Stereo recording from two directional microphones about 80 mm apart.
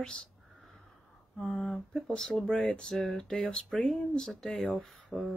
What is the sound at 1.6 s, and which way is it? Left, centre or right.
Speech, centre.